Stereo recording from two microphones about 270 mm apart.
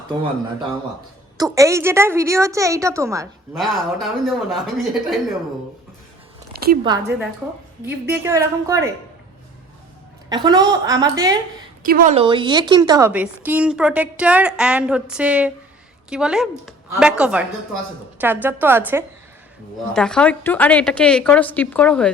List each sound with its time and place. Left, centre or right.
1.4 s a woman's voice: centre
3.6 s a woman's voice: centre
6.5 s a sound: right
6.8 s a woman's voice: centre
10.2 s a woman's voice: centre
11.8 s a woman's voice: right; by 19.0 s centre
19.9 s a woman's voice: centre